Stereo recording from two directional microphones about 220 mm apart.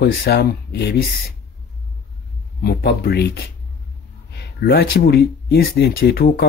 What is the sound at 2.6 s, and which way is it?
Speech, 50° left (ahead or behind).